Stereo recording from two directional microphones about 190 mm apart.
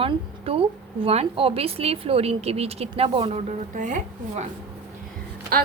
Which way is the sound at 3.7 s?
40° right (ahead or behind).